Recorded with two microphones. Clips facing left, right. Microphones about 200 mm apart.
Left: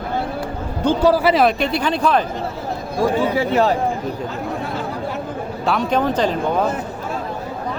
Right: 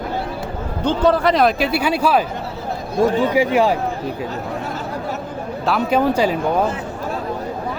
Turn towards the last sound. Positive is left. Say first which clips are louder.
# right 2 dB
turn(degrees=-10)  # may be behind; listen again after turning